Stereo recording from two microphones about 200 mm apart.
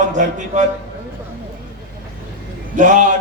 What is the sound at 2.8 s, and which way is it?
Speech, 40° right (ahead or behind).